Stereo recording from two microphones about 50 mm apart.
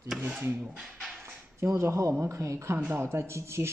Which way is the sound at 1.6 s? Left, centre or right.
Right.